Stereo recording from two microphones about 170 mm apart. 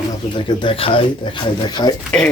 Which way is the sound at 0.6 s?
30° left (ahead or behind).